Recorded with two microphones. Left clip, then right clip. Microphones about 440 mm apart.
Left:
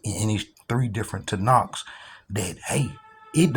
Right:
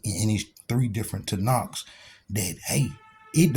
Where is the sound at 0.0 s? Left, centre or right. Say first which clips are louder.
Left 1 dB; right.